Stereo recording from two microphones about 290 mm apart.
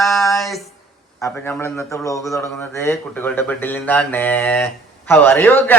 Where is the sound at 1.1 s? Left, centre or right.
Centre.